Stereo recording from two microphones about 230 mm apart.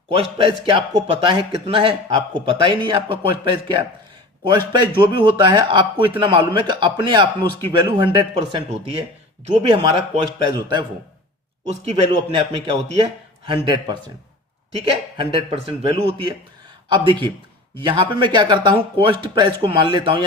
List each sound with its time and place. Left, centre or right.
0.2 s a man's voice: right
11.7 s a man's voice: right